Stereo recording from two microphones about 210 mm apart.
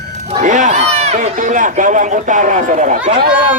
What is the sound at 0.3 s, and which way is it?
A man's voice, 35° right (ahead or behind).